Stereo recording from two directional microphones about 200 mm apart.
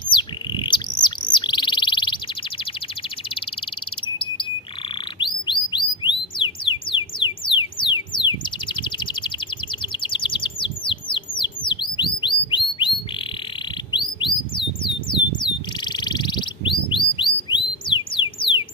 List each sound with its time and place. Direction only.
0.1 s bird: 25° left (ahead or behind)
5.2 s bird: 25° left (ahead or behind)
13.9 s bird: 25° left (ahead or behind)